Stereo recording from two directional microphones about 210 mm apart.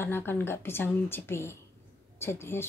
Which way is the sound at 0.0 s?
10° left (ahead or behind).